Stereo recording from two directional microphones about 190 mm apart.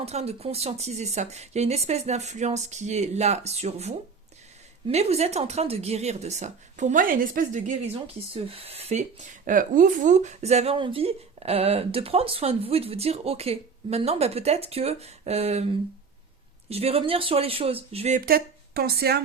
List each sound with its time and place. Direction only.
0.0 s speech: 35° right (ahead or behind)
18.3 s a woman's voice: 55° right (ahead or behind)